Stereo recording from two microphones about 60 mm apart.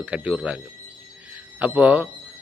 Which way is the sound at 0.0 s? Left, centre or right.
Right.